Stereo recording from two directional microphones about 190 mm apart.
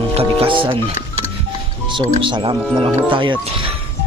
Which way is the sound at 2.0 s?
25° right (ahead or behind).